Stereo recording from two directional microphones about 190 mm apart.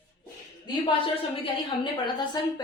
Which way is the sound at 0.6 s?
25° left (ahead or behind).